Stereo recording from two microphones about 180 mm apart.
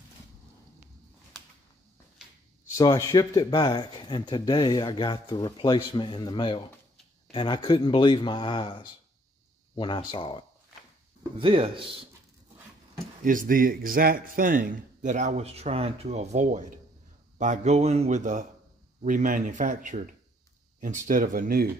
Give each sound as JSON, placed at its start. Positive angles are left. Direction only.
{"t": 2.8, "sound": "speech", "side_deg": 20}
{"t": 11.3, "sound": "speech", "side_deg": -30}
{"t": 13.2, "sound": "speech", "side_deg": -50}
{"t": 21.1, "sound": "speech", "side_deg": -50}